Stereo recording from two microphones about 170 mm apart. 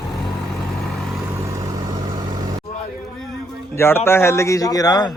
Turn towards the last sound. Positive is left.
turn(degrees=25)  # may be behind; listen again after turning